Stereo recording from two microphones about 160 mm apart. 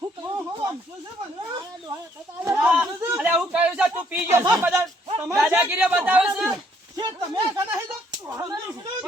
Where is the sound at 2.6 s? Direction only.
5° right (ahead or behind).